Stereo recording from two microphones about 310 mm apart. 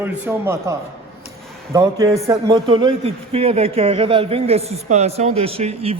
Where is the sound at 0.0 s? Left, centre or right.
Centre.